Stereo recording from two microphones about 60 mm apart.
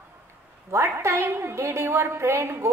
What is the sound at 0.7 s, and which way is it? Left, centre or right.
A woman's voice, right.